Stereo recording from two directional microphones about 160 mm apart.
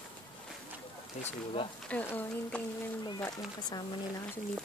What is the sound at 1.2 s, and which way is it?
Speech, 40° left (ahead or behind).